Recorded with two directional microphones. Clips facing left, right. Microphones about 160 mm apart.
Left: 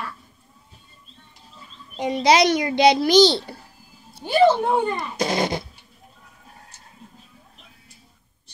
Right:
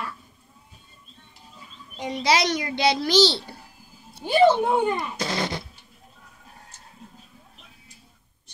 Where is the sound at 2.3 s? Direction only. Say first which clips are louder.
Left 6 dB; 20° left (ahead or behind).